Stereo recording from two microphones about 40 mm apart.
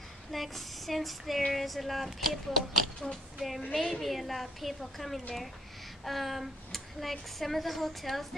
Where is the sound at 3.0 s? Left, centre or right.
Left.